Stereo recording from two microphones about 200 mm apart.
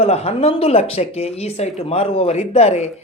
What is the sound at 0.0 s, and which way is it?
Speech, 30° left (ahead or behind).